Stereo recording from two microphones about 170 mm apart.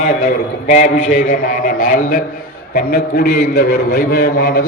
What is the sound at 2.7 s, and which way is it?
A man's voice, 65° left (ahead or behind).